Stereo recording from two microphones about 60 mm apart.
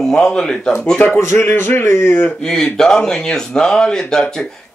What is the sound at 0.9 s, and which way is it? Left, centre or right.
A man's voice, left.